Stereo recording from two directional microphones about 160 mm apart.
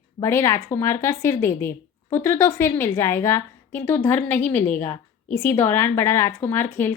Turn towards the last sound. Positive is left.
turn(degrees=15)  # may be behind; listen again after turning